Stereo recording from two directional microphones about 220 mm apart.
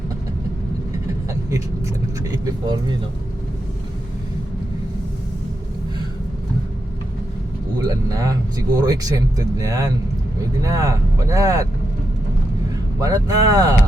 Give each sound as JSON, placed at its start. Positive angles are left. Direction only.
{"t": 1.3, "sound": "speech", "side_deg": -15}
{"t": 7.9, "sound": "speech", "side_deg": -15}
{"t": 13.0, "sound": "speech", "side_deg": -15}